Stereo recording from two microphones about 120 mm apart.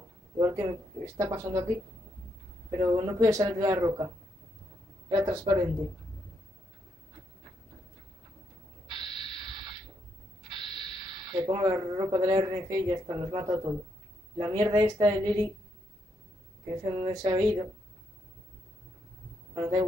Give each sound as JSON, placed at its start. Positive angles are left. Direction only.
{"t": 0.4, "sound": "speech", "side_deg": -30}
{"t": 2.7, "sound": "speech", "side_deg": -30}
{"t": 5.1, "sound": "speech", "side_deg": -30}
{"t": 8.9, "sound": "a sound", "side_deg": -40}
{"t": 10.5, "sound": "speech", "side_deg": -40}
{"t": 16.6, "sound": "speech", "side_deg": -35}
{"t": 19.5, "sound": "speech", "side_deg": -30}